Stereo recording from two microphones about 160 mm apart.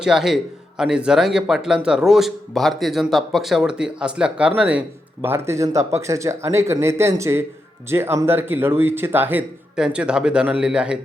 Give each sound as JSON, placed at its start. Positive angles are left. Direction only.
{"t": 0.0, "sound": "speech", "side_deg": -5}